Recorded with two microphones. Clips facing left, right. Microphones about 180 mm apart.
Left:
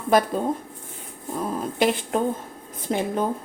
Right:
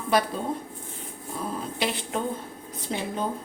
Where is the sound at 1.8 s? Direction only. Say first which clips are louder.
Left 7 dB; 50° left (ahead or behind).